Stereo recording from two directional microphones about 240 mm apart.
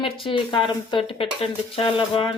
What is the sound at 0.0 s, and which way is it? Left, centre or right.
Speech, left.